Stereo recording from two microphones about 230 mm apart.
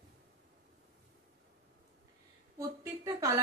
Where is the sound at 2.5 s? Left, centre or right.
Centre.